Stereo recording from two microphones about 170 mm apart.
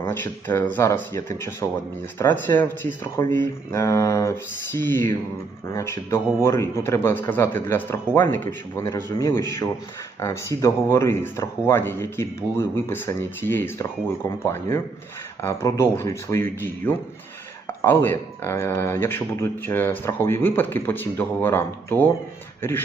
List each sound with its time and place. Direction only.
0.0 s speech: 15° left (ahead or behind)